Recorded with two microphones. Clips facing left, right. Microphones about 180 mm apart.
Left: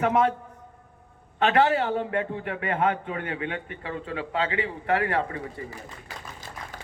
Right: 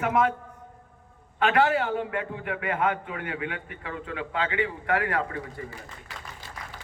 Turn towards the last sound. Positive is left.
turn(degrees=30)  # may be behind; listen again after turning